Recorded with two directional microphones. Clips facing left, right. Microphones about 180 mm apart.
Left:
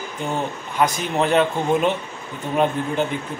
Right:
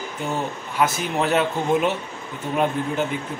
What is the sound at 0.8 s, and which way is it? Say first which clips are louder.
Speech: left 2 dB; 5° right (ahead or behind).